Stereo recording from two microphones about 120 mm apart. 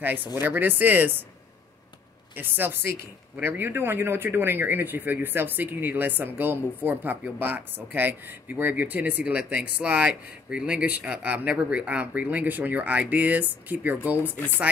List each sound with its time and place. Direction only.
0.0 s speech: 15° right (ahead or behind)
2.3 s speech: 15° right (ahead or behind)